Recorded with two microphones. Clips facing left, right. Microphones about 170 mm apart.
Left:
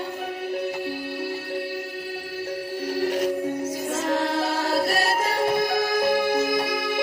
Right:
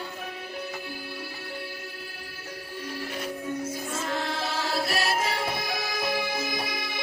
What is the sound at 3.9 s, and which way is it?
Music, 70° left (ahead or behind).